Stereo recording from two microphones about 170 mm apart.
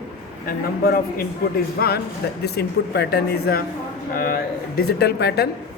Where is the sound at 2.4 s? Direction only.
75° left (ahead or behind).